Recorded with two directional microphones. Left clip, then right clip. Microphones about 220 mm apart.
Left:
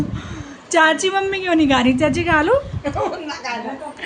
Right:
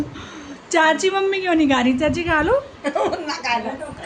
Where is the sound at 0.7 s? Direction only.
Centre (ahead or behind).